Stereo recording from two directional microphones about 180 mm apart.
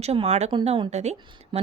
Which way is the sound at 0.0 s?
35° right (ahead or behind).